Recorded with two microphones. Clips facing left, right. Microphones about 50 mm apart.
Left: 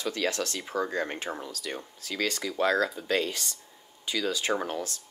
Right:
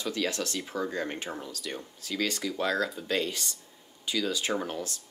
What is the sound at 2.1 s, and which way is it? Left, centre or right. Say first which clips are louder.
Speech: even; left.